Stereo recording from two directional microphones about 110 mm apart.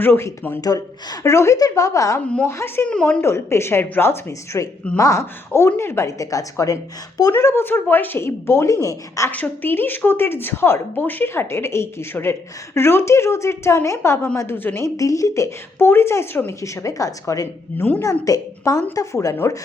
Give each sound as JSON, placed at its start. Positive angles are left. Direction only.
{"t": 0.0, "sound": "a woman's voice", "side_deg": 20}
{"t": 0.6, "sound": "a woman's voice", "side_deg": 35}
{"t": 2.9, "sound": "a woman's voice", "side_deg": 10}
{"t": 3.2, "sound": "a woman's voice", "side_deg": 25}
{"t": 9.3, "sound": "a woman's voice", "side_deg": 15}
{"t": 14.9, "sound": "a woman's voice", "side_deg": 30}
{"t": 17.7, "sound": "a woman's voice", "side_deg": 15}
{"t": 18.0, "sound": "a woman's voice", "side_deg": 30}